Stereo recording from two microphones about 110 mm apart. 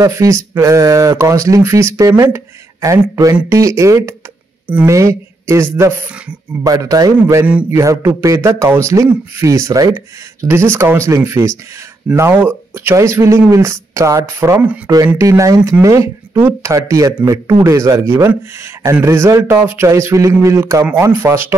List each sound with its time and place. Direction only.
0.0 s a man's voice: 25° right (ahead or behind)